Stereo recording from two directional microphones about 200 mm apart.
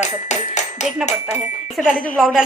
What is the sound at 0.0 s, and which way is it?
Music, 35° left (ahead or behind).